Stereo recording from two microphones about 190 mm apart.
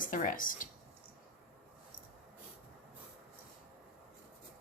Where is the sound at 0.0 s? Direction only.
45° left (ahead or behind).